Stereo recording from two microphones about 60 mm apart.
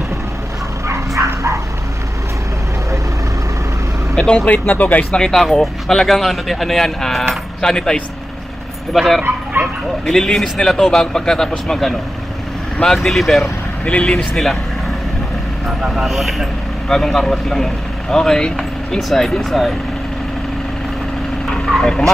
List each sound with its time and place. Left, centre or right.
0.8 s bow-wow: right
4.1 s speech: centre
4.5 s speech: left
5.1 s a man's voice: centre
8.9 s a man's voice: centre
15.9 s a man's voice: centre
21.5 s vehicle: centre